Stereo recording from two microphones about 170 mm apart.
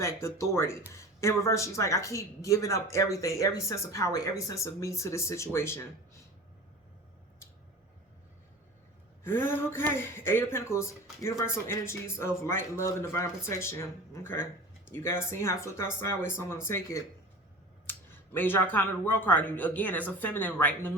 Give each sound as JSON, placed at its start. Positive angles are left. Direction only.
{"t": 0.0, "sound": "speech", "side_deg": 15}
{"t": 9.2, "sound": "speech", "side_deg": 15}